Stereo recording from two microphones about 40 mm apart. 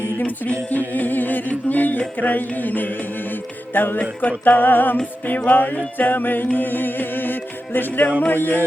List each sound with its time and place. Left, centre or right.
0.2 s music: left
3.9 s music: left